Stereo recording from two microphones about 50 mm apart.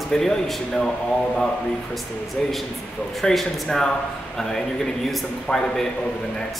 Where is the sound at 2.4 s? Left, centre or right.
Centre.